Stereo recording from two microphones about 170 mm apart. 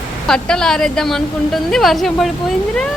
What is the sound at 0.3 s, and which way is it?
Speech, 5° left (ahead or behind).